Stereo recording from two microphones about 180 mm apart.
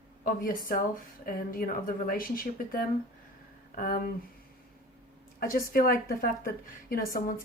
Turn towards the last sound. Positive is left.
turn(degrees=50)  # may be behind; listen again after turning